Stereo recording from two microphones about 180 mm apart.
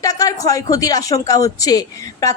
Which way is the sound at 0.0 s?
20° left (ahead or behind).